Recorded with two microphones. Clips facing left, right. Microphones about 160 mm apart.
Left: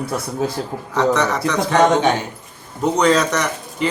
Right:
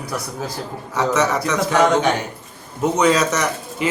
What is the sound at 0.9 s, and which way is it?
Speech, 5° right (ahead or behind).